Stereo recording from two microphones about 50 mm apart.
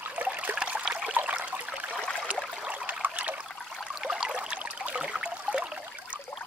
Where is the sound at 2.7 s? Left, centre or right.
Right.